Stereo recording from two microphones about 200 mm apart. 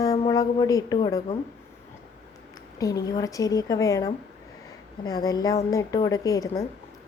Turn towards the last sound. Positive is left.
turn(degrees=15)  # may be behind; listen again after turning